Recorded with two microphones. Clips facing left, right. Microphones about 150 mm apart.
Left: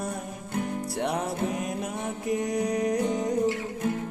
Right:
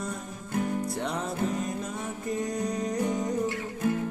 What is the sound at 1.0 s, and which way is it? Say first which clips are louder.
Music: left 2 dB; 70° left (ahead or behind).